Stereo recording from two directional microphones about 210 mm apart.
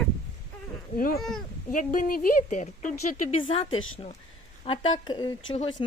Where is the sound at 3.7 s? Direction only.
70° left (ahead or behind).